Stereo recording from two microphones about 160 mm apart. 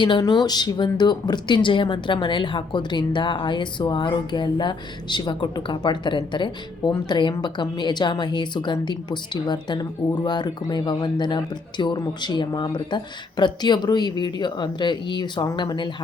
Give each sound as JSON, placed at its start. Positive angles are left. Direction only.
{"t": 0.0, "sound": "speech", "side_deg": 25}